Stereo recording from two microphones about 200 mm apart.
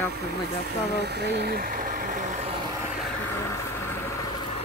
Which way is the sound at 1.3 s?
50° right (ahead or behind).